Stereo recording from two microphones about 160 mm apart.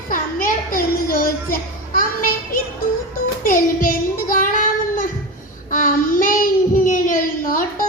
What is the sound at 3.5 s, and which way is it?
Child singing, 60° left (ahead or behind).